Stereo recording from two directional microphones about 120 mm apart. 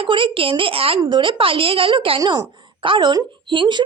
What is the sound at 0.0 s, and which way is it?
Speech, 45° right (ahead or behind).